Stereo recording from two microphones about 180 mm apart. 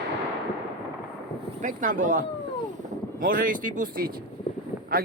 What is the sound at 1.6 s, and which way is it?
Speech, 45° right (ahead or behind).